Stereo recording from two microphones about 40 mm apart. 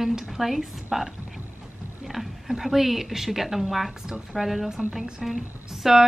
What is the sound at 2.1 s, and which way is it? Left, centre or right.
A woman's voice, centre.